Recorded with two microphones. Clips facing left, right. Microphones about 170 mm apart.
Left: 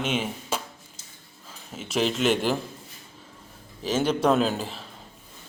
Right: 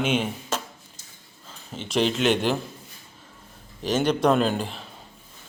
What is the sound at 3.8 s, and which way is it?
Speech, 5° left (ahead or behind).